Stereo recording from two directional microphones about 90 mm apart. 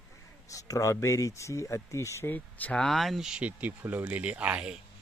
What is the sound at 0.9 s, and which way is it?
Speech, 35° left (ahead or behind).